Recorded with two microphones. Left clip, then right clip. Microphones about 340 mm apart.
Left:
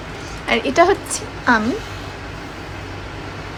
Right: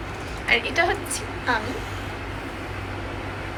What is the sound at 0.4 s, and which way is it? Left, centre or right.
Speech, centre.